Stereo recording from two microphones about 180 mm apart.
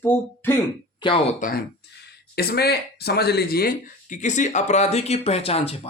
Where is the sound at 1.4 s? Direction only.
50° left (ahead or behind).